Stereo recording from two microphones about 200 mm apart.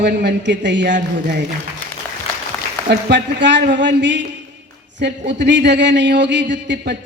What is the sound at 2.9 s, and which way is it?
A man's voice, 60° right (ahead or behind).